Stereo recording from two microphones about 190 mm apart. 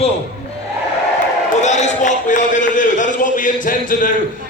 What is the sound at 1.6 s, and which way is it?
A man's voice, 40° left (ahead or behind).